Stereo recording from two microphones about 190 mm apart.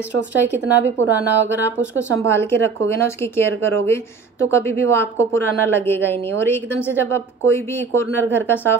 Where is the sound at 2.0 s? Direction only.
15° left (ahead or behind).